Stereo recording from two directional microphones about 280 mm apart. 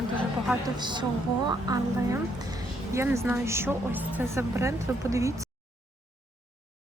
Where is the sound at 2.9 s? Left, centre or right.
Centre.